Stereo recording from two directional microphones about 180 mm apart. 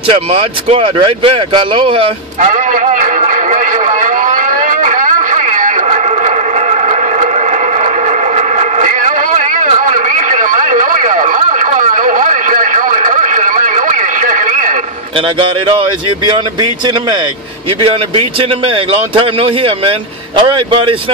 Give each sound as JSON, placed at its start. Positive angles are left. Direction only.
{"t": 0.1, "sound": "a man's voice", "side_deg": -35}
{"t": 2.4, "sound": "a sound", "side_deg": -45}
{"t": 15.1, "sound": "a man's voice", "side_deg": -30}
{"t": 17.8, "sound": "a man's voice", "side_deg": -30}